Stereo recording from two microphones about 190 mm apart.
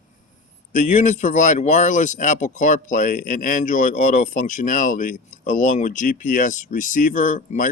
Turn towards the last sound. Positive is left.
turn(degrees=40)  # may be behind; listen again after turning